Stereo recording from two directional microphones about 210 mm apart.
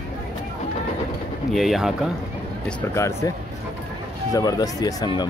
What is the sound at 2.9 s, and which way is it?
Speech, 15° left (ahead or behind).